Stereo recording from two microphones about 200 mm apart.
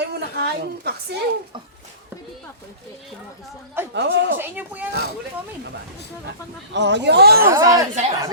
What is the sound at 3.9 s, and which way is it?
Speech, 60° right (ahead or behind).